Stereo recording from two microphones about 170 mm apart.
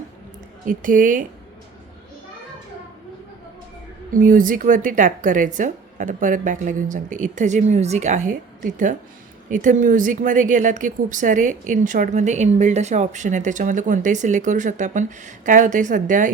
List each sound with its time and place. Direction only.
0.6 s speech: 50° right (ahead or behind)
4.1 s speech: 50° right (ahead or behind)